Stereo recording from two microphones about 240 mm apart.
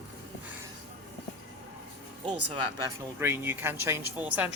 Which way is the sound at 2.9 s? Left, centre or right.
Centre.